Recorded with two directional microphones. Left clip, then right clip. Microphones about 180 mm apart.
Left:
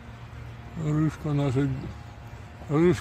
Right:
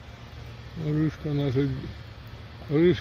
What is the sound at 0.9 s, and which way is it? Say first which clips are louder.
Speech: even; 20° left (ahead or behind).